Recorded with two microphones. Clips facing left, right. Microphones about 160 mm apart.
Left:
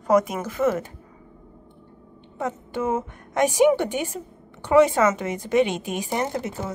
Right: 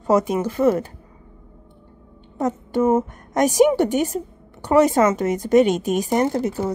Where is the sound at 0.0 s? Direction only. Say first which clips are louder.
Right 2 dB; 30° right (ahead or behind).